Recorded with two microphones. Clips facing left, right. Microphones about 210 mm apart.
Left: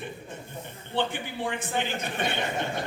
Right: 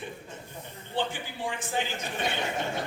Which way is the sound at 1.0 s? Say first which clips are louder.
Left 3 dB; 60° left (ahead or behind).